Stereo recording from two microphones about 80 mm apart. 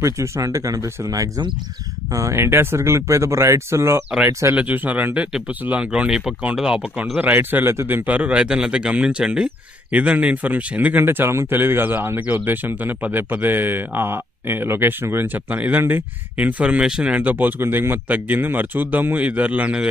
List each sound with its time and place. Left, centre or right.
0.0 s speech: right
4.6 s speech: right
8.1 s speech: centre